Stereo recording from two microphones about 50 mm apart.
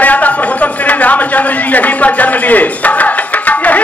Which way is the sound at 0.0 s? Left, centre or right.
Left.